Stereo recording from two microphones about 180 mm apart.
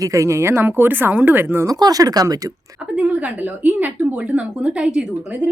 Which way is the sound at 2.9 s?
5° right (ahead or behind).